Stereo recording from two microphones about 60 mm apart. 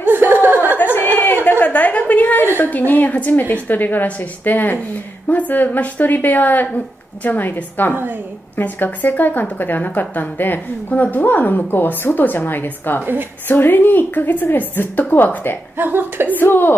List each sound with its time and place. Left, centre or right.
0.1 s chuckle: right
0.9 s a sound: left
2.6 s a woman's voice: left
15.8 s a woman's voice: right
16.3 s speech: left